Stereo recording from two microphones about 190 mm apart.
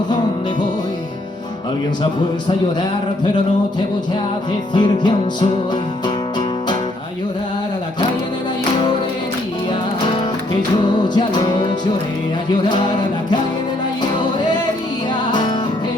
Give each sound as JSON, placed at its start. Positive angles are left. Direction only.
{"t": 4.7, "sound": "music", "side_deg": 25}
{"t": 10.8, "sound": "music", "side_deg": 25}
{"t": 12.6, "sound": "music", "side_deg": 25}
{"t": 15.3, "sound": "music", "side_deg": 25}